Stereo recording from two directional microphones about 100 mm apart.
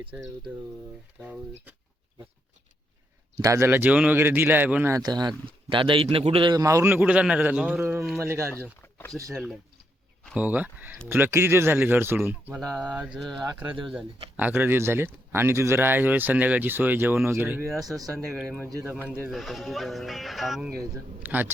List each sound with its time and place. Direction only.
1.2 s a man's voice: 15° right (ahead or behind)
3.3 s speech: 35° right (ahead or behind)
3.7 s a man's voice: 15° right (ahead or behind)
4.9 s speech: 40° right (ahead or behind); by 6.5 s 65° right (ahead or behind)
6.5 s speech: 35° right (ahead or behind)
6.8 s a man's voice: 15° right (ahead or behind)
7.8 s a man's voice: 20° right (ahead or behind)
9.3 s speech: centre (ahead or behind)
10.3 s a man's voice: 15° right (ahead or behind)
12.5 s speech: 5° right (ahead or behind)
14.3 s a man's voice: 15° right (ahead or behind)
17.8 s speech: 35° right (ahead or behind)
19.3 s speech: centre (ahead or behind)
21.2 s a man's voice: 20° right (ahead or behind)